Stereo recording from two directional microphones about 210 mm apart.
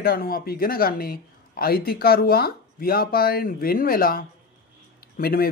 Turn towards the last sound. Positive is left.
turn(degrees=45)  # may be behind; listen again after turning